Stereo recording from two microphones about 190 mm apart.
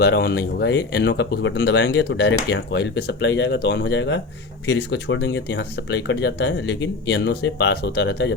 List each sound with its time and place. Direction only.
0.0 s speech: 60° left (ahead or behind)